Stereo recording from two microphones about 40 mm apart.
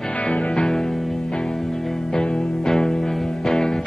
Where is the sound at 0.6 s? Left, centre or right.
Centre.